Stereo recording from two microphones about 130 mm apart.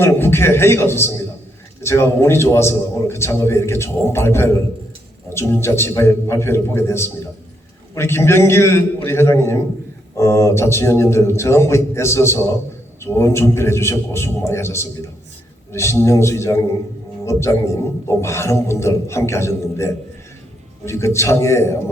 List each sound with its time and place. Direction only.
0.0 s a man's voice: 20° left (ahead or behind)